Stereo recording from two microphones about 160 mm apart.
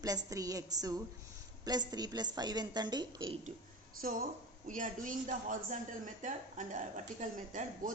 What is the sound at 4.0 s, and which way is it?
Speech, 65° right (ahead or behind).